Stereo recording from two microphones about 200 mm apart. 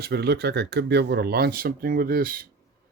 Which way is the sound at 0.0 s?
55° right (ahead or behind).